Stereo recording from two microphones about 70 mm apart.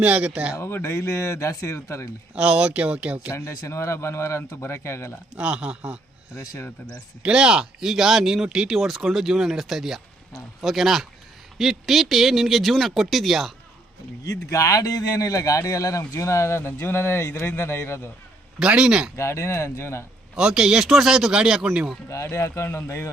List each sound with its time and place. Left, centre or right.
0.0 s speech: centre
0.5 s speech: left
2.3 s speech: centre
3.7 s speech: left
5.4 s speech: centre
6.3 s speech: left
7.2 s speech: centre
14.3 s speech: left
18.6 s speech: centre
19.1 s speech: left
20.3 s speech: centre
22.1 s speech: left